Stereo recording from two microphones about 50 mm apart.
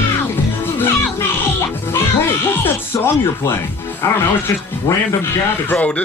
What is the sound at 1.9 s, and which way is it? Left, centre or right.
Speech, left.